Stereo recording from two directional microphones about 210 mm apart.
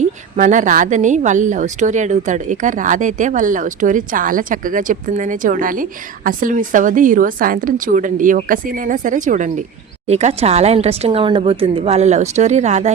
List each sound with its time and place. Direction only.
0.3 s speech: 40° right (ahead or behind)